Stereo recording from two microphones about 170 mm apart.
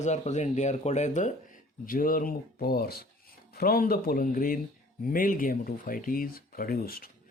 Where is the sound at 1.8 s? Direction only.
55° left (ahead or behind).